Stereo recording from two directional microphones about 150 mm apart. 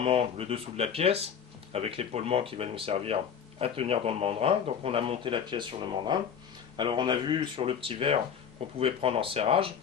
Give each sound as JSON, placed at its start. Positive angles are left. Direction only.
{"t": 0.0, "sound": "speech", "side_deg": -40}